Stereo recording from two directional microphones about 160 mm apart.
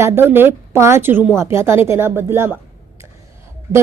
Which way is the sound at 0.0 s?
15° right (ahead or behind).